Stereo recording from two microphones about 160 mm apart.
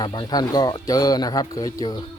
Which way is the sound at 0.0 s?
25° left (ahead or behind).